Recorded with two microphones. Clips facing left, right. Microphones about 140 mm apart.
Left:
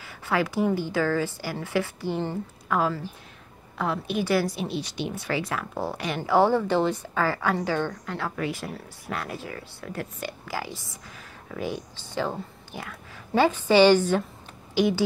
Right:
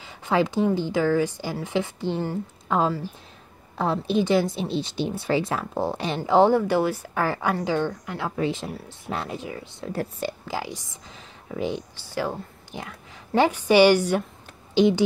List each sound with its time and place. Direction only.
0.0 s a woman's voice: 20° right (ahead or behind)
12.1 s a woman's voice: 10° right (ahead or behind)